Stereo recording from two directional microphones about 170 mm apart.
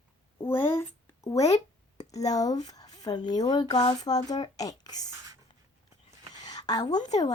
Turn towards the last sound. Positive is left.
turn(degrees=20)  # may be behind; listen again after turning